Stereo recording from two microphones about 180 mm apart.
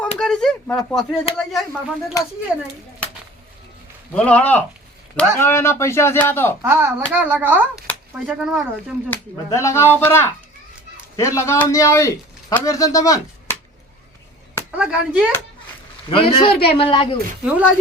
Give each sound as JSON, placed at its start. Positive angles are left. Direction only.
{"t": 0.0, "sound": "speech", "side_deg": 5}
{"t": 4.1, "sound": "a man's voice", "side_deg": 5}
{"t": 6.6, "sound": "speech", "side_deg": -15}
{"t": 9.6, "sound": "a man's voice", "side_deg": 15}
{"t": 14.8, "sound": "speech", "side_deg": -5}
{"t": 16.0, "sound": "a man's voice", "side_deg": 30}
{"t": 17.4, "sound": "speech", "side_deg": -5}